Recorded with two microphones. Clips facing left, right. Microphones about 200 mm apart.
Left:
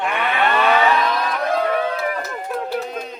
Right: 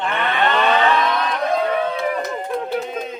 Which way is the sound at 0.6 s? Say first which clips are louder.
Left 1 dB; centre (ahead or behind).